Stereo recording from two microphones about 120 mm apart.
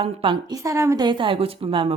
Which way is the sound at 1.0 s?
45° right (ahead or behind).